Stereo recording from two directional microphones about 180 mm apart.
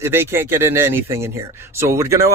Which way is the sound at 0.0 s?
15° right (ahead or behind).